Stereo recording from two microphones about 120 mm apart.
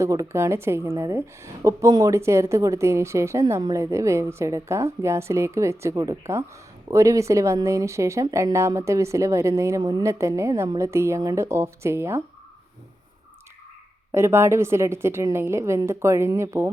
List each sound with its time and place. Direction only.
0.0 s a woman's voice: 25° right (ahead or behind)
14.1 s a woman's voice: 20° right (ahead or behind)